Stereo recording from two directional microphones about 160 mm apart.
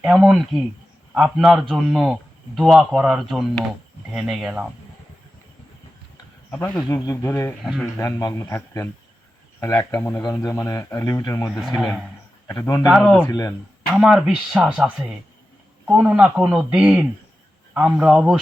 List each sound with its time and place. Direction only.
0.0 s speech: 5° right (ahead or behind)
6.8 s speech: 20° left (ahead or behind)
7.6 s speech: centre (ahead or behind)
7.9 s a man's voice: 20° left (ahead or behind)
11.4 s speech: centre (ahead or behind)
12.5 s speech: 20° left (ahead or behind)
12.9 s a man's voice: centre (ahead or behind)